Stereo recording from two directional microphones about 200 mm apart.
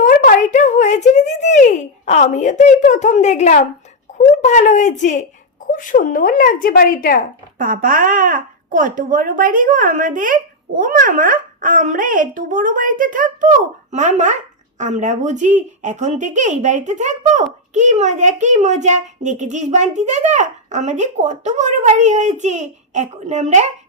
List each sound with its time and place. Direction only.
0.0 s a woman's voice: 40° left (ahead or behind)
7.6 s speech: 45° right (ahead or behind)